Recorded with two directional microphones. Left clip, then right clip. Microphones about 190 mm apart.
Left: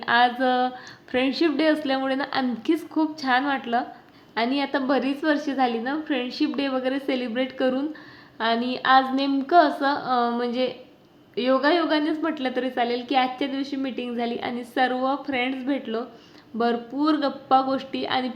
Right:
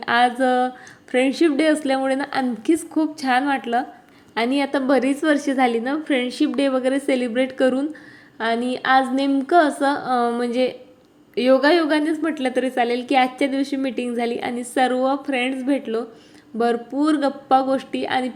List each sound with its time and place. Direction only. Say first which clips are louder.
0.0 s a woman's voice: right 2 dB; 20° right (ahead or behind)